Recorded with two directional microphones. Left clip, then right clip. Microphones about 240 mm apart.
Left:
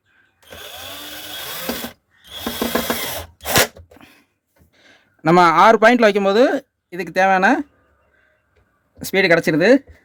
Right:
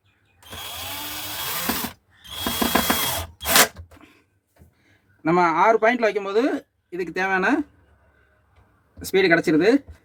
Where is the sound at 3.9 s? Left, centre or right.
Left.